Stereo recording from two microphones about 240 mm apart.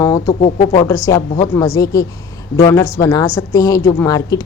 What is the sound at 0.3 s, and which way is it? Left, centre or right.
Speech, left.